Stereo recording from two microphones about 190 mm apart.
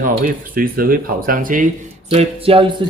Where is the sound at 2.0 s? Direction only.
30° right (ahead or behind).